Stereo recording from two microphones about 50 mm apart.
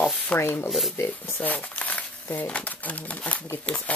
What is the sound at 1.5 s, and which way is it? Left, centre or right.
Speech, left.